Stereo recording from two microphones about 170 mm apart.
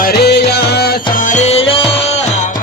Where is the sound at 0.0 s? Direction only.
70° left (ahead or behind).